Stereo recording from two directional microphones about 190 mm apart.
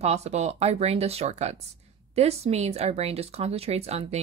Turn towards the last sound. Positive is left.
turn(degrees=-35)  # may be behind; listen again after turning